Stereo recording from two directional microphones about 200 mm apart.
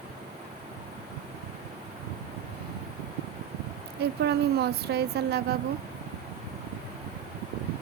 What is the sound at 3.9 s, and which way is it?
Speech, 55° right (ahead or behind).